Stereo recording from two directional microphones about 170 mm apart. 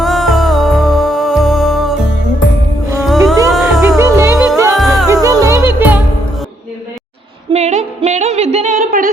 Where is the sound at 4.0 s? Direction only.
20° right (ahead or behind).